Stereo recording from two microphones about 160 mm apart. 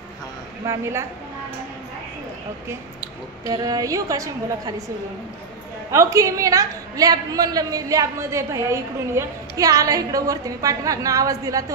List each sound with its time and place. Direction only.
3.4 s a woman's voice: 25° right (ahead or behind)
5.9 s a woman's voice: 20° right (ahead or behind)